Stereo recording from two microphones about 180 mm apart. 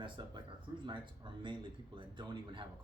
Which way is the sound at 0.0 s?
25° right (ahead or behind).